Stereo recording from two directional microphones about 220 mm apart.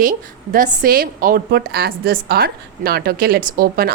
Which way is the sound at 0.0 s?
40° right (ahead or behind).